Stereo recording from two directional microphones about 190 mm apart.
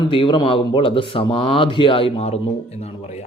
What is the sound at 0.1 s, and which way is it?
A man's voice, 25° left (ahead or behind).